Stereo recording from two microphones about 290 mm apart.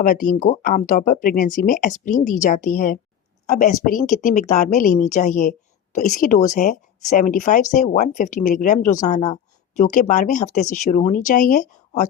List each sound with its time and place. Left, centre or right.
0.0 s speech: left